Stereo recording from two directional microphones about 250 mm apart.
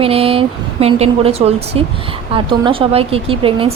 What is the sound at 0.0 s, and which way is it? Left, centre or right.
Speech, right.